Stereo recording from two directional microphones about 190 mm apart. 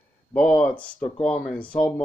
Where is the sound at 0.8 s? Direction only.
5° left (ahead or behind).